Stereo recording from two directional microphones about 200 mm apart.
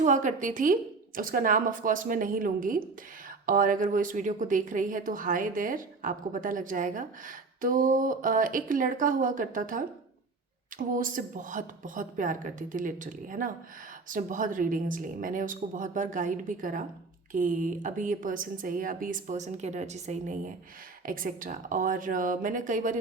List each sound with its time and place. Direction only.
0.0 s a woman's voice: 40° right (ahead or behind)